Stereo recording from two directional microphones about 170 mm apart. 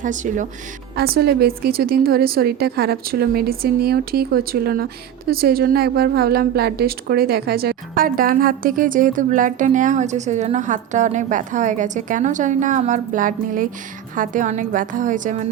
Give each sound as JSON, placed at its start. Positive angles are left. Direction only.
{"t": 0.0, "sound": "a woman's voice", "side_deg": -45}
{"t": 0.9, "sound": "a woman's voice", "side_deg": -65}